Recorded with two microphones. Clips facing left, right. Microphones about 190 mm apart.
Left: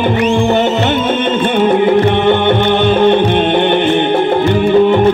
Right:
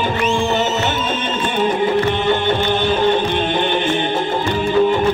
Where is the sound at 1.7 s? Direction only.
60° left (ahead or behind).